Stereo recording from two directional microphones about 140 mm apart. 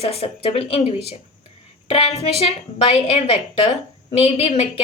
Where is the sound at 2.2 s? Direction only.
45° left (ahead or behind).